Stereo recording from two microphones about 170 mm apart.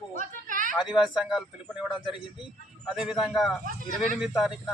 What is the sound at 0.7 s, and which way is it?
A man's voice, 5° right (ahead or behind).